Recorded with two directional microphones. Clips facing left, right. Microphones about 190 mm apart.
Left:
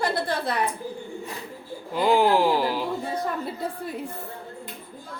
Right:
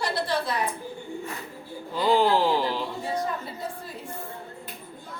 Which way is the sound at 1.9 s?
15° left (ahead or behind).